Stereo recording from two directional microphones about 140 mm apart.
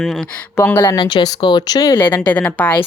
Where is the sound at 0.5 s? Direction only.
15° left (ahead or behind).